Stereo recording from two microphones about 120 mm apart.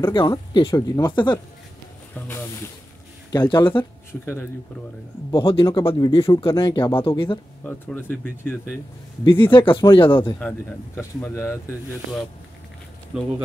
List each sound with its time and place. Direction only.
0.1 s speech: 40° left (ahead or behind)
0.7 s speech: 25° left (ahead or behind)
1.1 s speech: 40° left (ahead or behind)
3.3 s speech: 35° left (ahead or behind)
4.1 s speech: 20° left (ahead or behind)
5.3 s speech: 45° left (ahead or behind)
7.6 s speech: 15° left (ahead or behind)
9.2 s speech: 40° left (ahead or behind)
11.0 s speech: 20° left (ahead or behind)
13.1 s speech: 5° right (ahead or behind)